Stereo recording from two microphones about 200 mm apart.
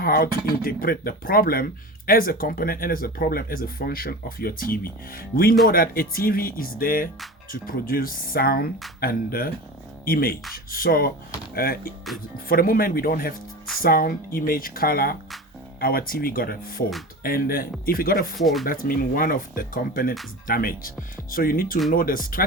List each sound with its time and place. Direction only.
0.0 s speech: 50° left (ahead or behind)
18.3 s speech: centre (ahead or behind)
18.6 s speech: 45° left (ahead or behind)